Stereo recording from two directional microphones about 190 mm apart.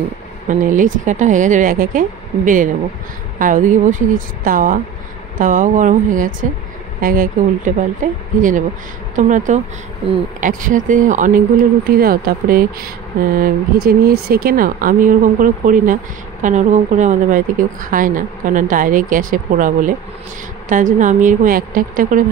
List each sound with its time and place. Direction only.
0.5 s a woman's voice: 45° right (ahead or behind)